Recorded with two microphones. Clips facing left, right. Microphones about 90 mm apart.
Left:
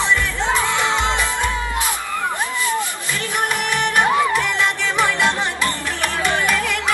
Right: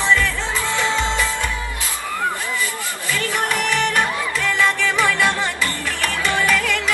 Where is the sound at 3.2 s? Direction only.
20° left (ahead or behind).